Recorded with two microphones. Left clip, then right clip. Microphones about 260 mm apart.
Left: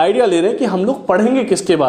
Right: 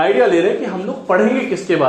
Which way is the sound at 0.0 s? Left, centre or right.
Left.